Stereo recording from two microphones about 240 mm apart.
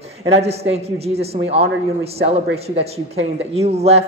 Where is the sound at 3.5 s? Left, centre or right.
Right.